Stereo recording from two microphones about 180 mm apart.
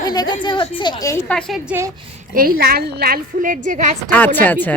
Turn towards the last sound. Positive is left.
turn(degrees=10)  # may be behind; listen again after turning